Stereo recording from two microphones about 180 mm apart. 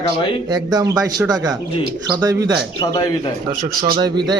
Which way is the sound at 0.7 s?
20° right (ahead or behind).